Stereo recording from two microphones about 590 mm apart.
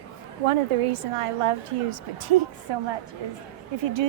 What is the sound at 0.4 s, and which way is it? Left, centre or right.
A woman's voice, right.